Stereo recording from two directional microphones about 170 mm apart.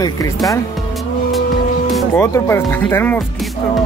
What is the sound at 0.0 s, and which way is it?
Speech, 20° left (ahead or behind).